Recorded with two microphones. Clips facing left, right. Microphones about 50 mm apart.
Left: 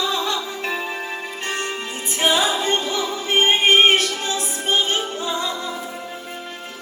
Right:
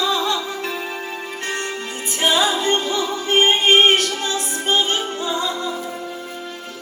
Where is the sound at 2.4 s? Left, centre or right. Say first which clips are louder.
Right 2 dB; left.